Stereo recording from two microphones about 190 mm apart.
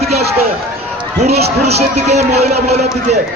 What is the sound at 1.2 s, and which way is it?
Speech, 35° right (ahead or behind).